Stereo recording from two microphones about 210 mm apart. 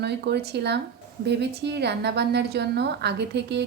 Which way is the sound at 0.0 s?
50° right (ahead or behind).